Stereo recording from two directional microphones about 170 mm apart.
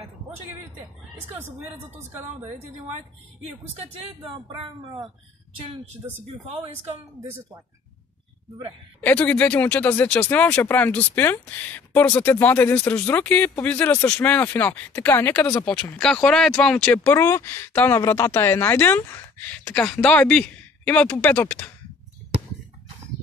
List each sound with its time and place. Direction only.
2.1 s a woman's voice: 10° right (ahead or behind)
4.6 s speech: 25° right (ahead or behind)
9.0 s speech: 10° left (ahead or behind)